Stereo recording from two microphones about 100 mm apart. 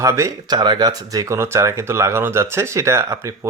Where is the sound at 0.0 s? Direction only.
30° right (ahead or behind).